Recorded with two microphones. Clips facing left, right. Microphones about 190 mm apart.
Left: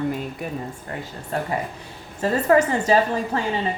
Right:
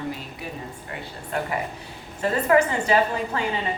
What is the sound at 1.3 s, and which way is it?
A woman's voice, 35° left (ahead or behind).